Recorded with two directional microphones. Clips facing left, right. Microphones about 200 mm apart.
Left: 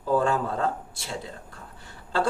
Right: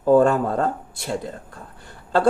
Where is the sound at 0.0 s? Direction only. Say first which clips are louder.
Right 8 dB; 55° right (ahead or behind).